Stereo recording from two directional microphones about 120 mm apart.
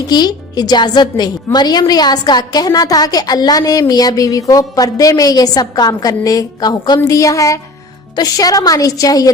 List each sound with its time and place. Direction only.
0.1 s a woman's voice: 35° left (ahead or behind)